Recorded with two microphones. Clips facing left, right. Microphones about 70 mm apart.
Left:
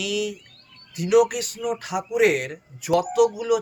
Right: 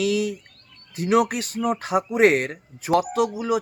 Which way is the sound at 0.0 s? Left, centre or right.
Right.